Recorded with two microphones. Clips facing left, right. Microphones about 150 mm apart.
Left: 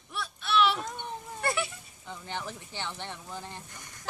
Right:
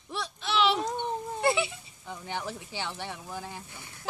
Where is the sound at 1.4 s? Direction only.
15° right (ahead or behind).